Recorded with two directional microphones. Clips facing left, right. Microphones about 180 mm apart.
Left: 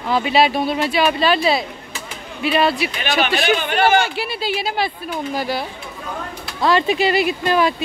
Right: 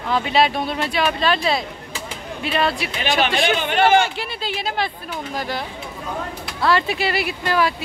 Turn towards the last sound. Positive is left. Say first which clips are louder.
# left 3 dB
turn(degrees=20)  # may be behind; listen again after turning